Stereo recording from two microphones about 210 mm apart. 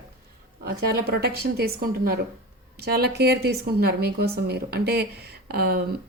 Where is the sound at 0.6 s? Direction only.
50° right (ahead or behind).